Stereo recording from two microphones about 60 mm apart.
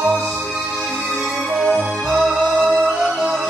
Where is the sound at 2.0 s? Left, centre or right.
Centre.